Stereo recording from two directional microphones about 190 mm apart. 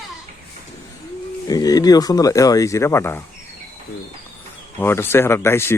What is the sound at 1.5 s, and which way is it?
Speech, 20° left (ahead or behind).